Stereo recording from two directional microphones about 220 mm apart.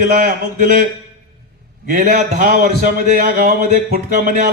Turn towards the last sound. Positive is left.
turn(degrees=-40)  # may be behind; listen again after turning